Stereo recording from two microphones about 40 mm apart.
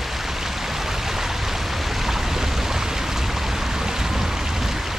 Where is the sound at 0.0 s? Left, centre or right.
Centre.